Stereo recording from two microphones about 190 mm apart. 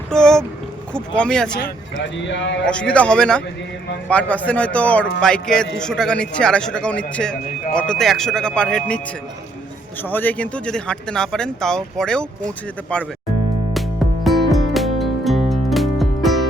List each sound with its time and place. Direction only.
0.1 s boat: 5° left (ahead or behind)
0.9 s speech: 5° left (ahead or behind)
2.0 s speech: 70° left (ahead or behind)
2.6 s speech: 5° left (ahead or behind)
10.0 s speech: 10° left (ahead or behind)
14.3 s music: centre (ahead or behind)